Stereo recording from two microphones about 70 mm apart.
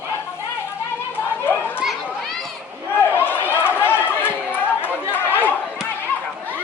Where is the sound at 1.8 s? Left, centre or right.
Centre.